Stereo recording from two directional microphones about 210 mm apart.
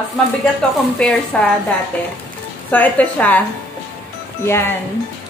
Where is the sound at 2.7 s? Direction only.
5° left (ahead or behind).